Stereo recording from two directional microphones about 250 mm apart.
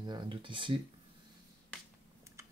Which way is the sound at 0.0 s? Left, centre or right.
Centre.